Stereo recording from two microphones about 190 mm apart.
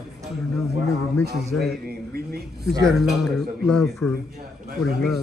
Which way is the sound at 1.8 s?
55° right (ahead or behind).